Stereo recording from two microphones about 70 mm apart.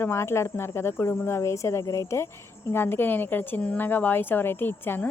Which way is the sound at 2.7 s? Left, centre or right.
Left.